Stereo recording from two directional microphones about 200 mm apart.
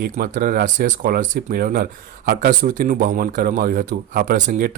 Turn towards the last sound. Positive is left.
turn(degrees=-40)  # may be behind; listen again after turning